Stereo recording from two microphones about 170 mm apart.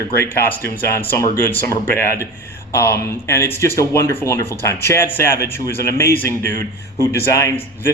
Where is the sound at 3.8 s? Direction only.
15° left (ahead or behind).